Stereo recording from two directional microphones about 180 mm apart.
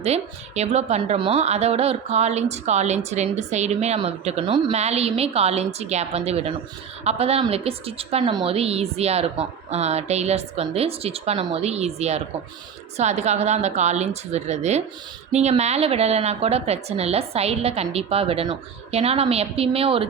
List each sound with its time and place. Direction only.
0.0 s a woman's voice: 35° right (ahead or behind)